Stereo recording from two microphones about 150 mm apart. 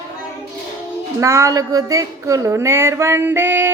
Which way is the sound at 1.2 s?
20° right (ahead or behind).